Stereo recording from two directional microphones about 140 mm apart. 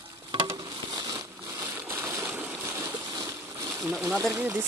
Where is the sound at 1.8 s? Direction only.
15° right (ahead or behind).